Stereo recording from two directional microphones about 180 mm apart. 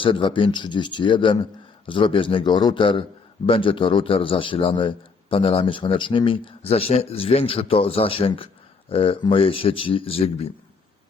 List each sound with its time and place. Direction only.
0.0 s a man's voice: 30° left (ahead or behind)